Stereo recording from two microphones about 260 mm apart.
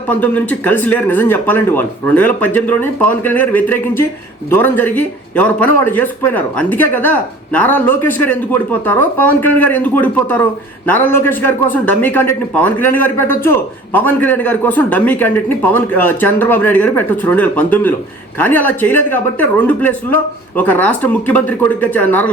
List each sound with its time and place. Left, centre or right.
0.1 s a man's voice: centre